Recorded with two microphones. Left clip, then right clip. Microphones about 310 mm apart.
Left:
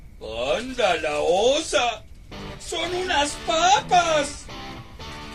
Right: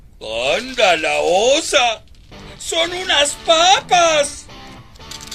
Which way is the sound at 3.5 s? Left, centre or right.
Right.